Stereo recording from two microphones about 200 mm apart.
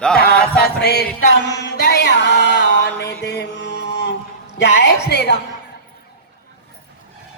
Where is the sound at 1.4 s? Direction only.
60° left (ahead or behind).